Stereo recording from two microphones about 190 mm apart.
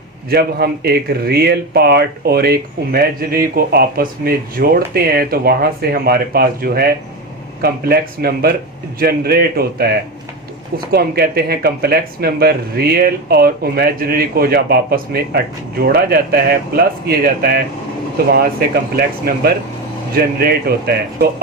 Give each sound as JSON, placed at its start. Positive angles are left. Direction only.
{"t": 0.3, "sound": "speech", "side_deg": -55}